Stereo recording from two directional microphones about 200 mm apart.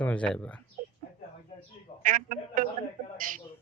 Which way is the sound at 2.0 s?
40° right (ahead or behind).